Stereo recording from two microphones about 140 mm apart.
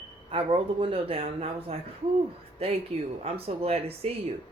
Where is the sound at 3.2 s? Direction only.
45° right (ahead or behind).